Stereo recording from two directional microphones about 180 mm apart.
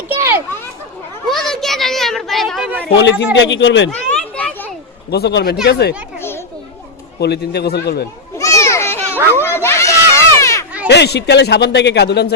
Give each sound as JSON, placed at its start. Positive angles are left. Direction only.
{"t": 0.1, "sound": "children playing", "side_deg": -15}
{"t": 1.3, "sound": "children playing", "side_deg": 0}
{"t": 2.9, "sound": "a man's voice", "side_deg": 80}
{"t": 3.3, "sound": "speech", "side_deg": 90}
{"t": 3.9, "sound": "children playing", "side_deg": 5}
{"t": 5.1, "sound": "a man's voice", "side_deg": 65}
{"t": 7.2, "sound": "a man's voice", "side_deg": 65}
{"t": 8.4, "sound": "children playing", "side_deg": 15}
{"t": 9.1, "sound": "children playing", "side_deg": -15}
{"t": 9.4, "sound": "a sound", "side_deg": 15}
{"t": 10.8, "sound": "a man's voice", "side_deg": 70}